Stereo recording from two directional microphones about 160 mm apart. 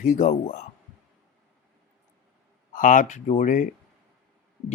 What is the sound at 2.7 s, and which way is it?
Speech, 55° left (ahead or behind).